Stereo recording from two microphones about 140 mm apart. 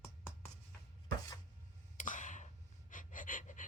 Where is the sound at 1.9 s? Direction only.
65° left (ahead or behind).